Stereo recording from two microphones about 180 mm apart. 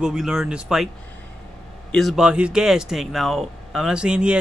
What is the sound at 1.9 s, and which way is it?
Speech, centre (ahead or behind).